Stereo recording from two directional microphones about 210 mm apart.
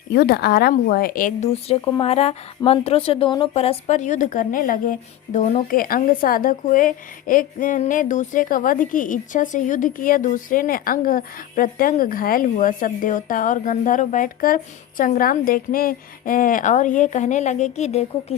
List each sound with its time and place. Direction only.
0.1 s speech: 50° left (ahead or behind); by 18.3 s 30° left (ahead or behind)